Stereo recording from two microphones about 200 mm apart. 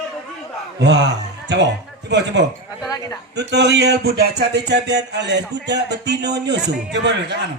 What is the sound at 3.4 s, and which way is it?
Speech, 60° right (ahead or behind).